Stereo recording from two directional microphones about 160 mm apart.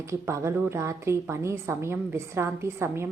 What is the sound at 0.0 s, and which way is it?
A woman's voice, 15° right (ahead or behind).